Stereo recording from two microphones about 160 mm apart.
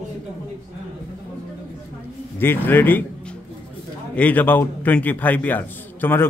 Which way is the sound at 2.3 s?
15° left (ahead or behind).